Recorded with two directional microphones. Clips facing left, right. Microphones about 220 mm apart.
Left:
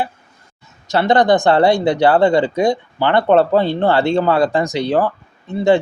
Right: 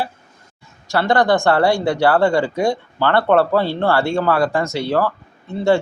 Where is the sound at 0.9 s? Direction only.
20° left (ahead or behind).